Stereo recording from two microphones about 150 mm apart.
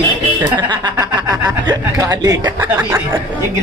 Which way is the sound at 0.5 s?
30° right (ahead or behind).